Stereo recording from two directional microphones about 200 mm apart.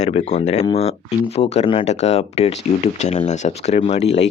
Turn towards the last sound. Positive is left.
turn(degrees=35)  # may be behind; listen again after turning